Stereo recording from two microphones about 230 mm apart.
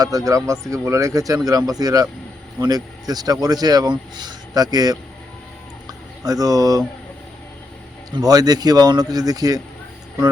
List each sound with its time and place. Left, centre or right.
0.3 s speech: centre
6.2 s speech: centre
8.1 s speech: centre